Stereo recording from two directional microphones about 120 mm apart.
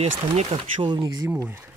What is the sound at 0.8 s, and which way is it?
Speech, 35° right (ahead or behind).